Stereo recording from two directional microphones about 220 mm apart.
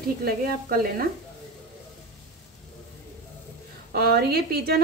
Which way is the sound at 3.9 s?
45° right (ahead or behind).